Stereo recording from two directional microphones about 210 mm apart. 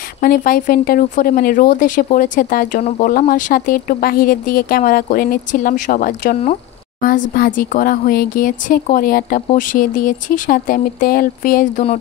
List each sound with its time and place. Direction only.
0.2 s speech: 45° left (ahead or behind)